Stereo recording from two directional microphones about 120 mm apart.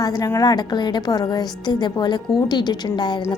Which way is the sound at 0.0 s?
30° left (ahead or behind).